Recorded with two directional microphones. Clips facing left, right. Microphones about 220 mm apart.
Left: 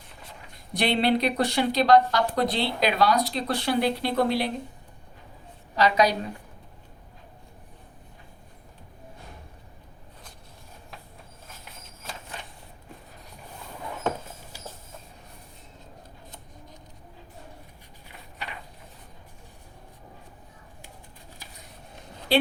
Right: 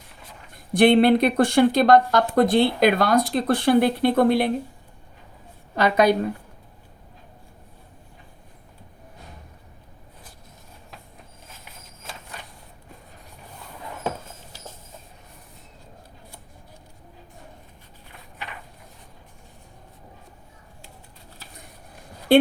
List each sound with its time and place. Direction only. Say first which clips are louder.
0.7 s speech: right 8 dB; 50° right (ahead or behind)
5.7 s a woman's voice: right 4 dB; 55° right (ahead or behind)
22.3 s a sound: right 7 dB; 55° right (ahead or behind)